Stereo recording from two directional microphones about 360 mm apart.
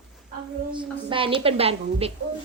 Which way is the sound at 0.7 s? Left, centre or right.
Centre.